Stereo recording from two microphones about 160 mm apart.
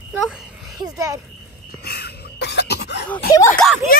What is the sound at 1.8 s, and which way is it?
Cough, 80° left.